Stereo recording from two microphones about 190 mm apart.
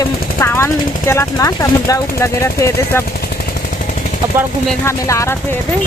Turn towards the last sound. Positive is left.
turn(degrees=15)  # may be behind; listen again after turning